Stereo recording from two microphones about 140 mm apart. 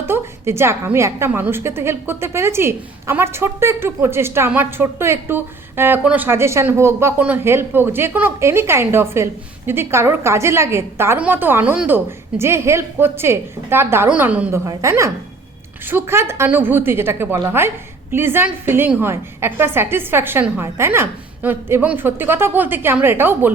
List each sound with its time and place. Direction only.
0.0 s a woman's voice: 15° right (ahead or behind)
14.7 s a woman's voice: 20° right (ahead or behind)